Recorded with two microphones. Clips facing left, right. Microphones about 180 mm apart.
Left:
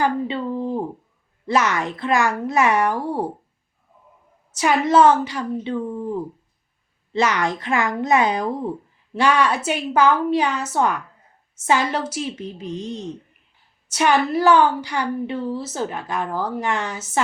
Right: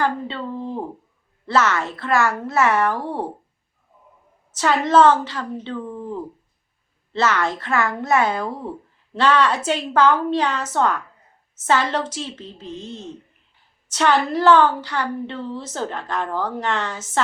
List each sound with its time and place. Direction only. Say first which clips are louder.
0.0 s a woman's voice: left 2 dB; 15° left (ahead or behind)
4.5 s a woman's voice: even; 10° left (ahead or behind)
7.1 s a woman's voice: even; 15° left (ahead or behind)